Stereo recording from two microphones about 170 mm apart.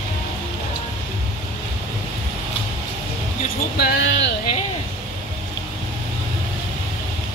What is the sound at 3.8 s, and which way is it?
Speech, 75° left (ahead or behind).